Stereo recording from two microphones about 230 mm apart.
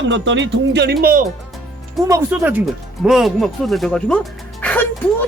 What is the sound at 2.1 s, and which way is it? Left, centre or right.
Speech, centre.